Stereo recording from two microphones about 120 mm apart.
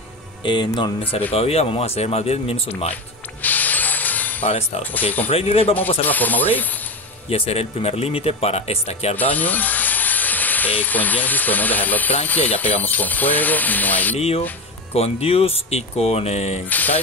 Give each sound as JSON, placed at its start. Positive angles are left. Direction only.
{"t": 0.4, "sound": "speech", "side_deg": 40}
{"t": 1.3, "sound": "speech", "side_deg": 60}
{"t": 3.4, "sound": "a sound", "side_deg": 15}
{"t": 4.5, "sound": "a man's voice", "side_deg": 60}
{"t": 6.0, "sound": "speech", "side_deg": 15}
{"t": 7.2, "sound": "speech", "side_deg": 55}
{"t": 9.1, "sound": "speech", "side_deg": 15}
{"t": 14.1, "sound": "speech", "side_deg": 55}
{"t": 16.6, "sound": "mechanisms", "side_deg": 15}